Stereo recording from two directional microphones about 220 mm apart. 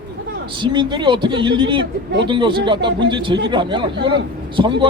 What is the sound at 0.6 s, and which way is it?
Speech, 20° right (ahead or behind).